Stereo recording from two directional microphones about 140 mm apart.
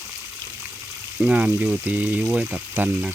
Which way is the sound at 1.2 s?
10° right (ahead or behind).